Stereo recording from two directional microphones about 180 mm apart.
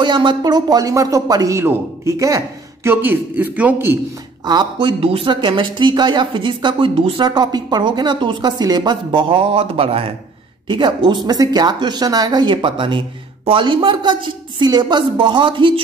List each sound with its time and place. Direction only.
0.0 s speech: 25° right (ahead or behind)
4.5 s speech: 25° right (ahead or behind)